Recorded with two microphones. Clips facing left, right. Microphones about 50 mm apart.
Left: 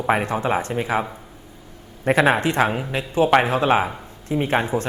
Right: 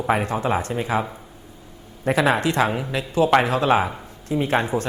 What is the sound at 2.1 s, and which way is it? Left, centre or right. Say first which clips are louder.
Speech: left 2 dB; left.